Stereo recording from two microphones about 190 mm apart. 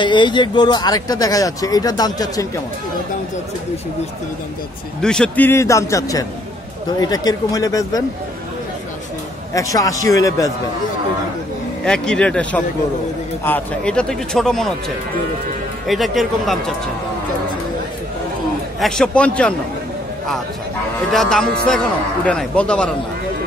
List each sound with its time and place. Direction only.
0.0 s speech: 25° left (ahead or behind)
5.0 s a man's voice: 5° left (ahead or behind)
9.5 s a man's voice: 15° left (ahead or behind)
11.8 s a man's voice: 5° left (ahead or behind)
15.9 s a man's voice: centre (ahead or behind)
18.8 s a man's voice: 5° left (ahead or behind)
21.1 s a man's voice: centre (ahead or behind)